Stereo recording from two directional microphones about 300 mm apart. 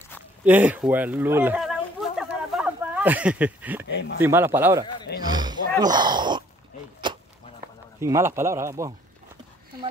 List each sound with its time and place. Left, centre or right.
0.5 s a sound: centre
3.9 s speech: left
4.2 s a man's voice: centre
5.2 s roaring cats: centre
7.0 s a sound: centre
8.0 s a man's voice: centre